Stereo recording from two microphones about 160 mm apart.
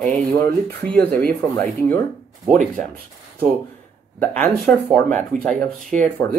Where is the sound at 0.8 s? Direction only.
10° left (ahead or behind).